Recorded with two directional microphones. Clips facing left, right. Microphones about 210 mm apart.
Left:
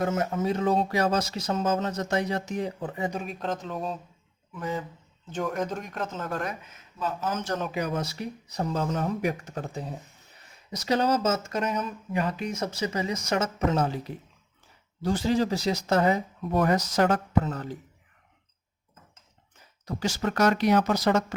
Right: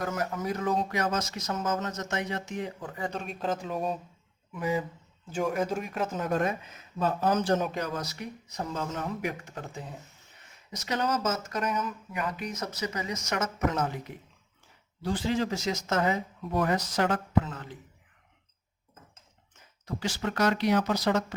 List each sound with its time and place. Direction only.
0.0 s speech: 25° left (ahead or behind)
3.1 s speech: 5° left (ahead or behind); by 6.6 s 20° right (ahead or behind)
7.0 s speech: 35° right (ahead or behind)
7.8 s speech: 15° left (ahead or behind)
8.0 s speech: 30° left (ahead or behind)
19.8 s speech: 40° left (ahead or behind)